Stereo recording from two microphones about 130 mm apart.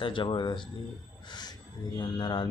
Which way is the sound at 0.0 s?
40° left (ahead or behind).